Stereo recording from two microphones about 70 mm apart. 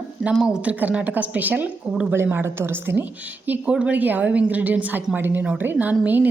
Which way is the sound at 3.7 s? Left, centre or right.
Centre.